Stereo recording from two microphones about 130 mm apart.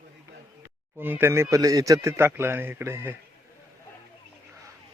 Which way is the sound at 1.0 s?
15° right (ahead or behind).